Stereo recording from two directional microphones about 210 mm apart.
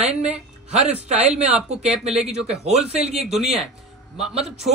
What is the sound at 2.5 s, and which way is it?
Speech, 30° right (ahead or behind).